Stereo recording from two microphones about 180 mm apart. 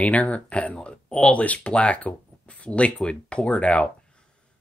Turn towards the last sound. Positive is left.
turn(degrees=5)  # may be behind; listen again after turning